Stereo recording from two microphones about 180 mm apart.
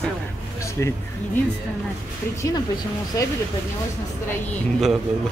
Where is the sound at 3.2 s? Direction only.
15° left (ahead or behind).